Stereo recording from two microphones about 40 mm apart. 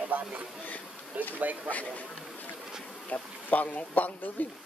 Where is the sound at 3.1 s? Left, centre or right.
Left.